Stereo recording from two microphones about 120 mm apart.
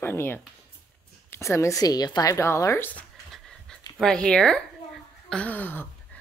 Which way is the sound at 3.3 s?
5° left (ahead or behind).